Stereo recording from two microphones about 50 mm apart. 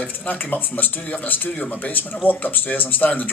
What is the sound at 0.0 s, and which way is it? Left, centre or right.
Speech, left.